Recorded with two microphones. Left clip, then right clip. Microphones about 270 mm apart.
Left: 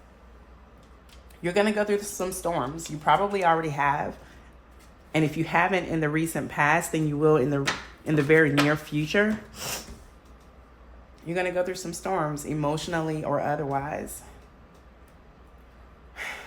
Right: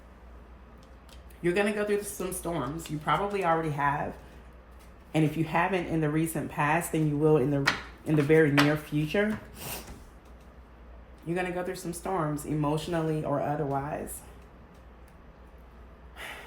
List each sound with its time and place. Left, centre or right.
1.4 s speech: centre
5.1 s speech: centre
11.3 s speech: centre